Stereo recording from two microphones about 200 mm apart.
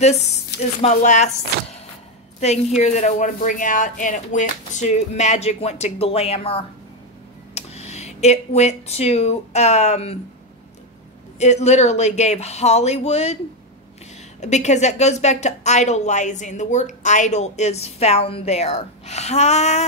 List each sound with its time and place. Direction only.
0.0 s a woman's voice: 35° left (ahead or behind)
2.8 s a woman's voice: 35° left (ahead or behind)
11.3 s a woman's voice: 35° left (ahead or behind)
14.4 s a woman's voice: 35° left (ahead or behind)